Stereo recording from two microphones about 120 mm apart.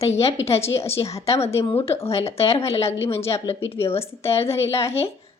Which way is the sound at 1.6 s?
55° left (ahead or behind).